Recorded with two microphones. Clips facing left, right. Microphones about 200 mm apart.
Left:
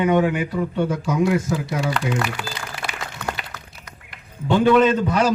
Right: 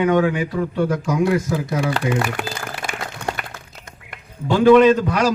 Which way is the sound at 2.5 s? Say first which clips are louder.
Right 3 dB; 45° right (ahead or behind).